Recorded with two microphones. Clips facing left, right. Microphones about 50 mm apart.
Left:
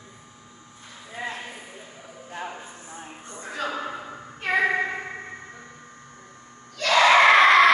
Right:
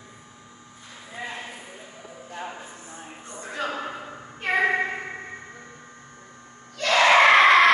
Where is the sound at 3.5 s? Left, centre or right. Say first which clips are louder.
Even; centre.